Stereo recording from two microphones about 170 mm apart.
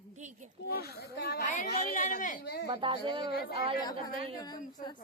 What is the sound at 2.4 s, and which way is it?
Speech, 70° left (ahead or behind).